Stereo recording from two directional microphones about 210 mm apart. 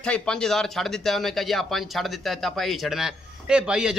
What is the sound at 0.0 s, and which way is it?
Speech, 5° left (ahead or behind).